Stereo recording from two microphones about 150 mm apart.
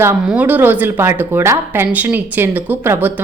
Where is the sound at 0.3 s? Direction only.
10° right (ahead or behind).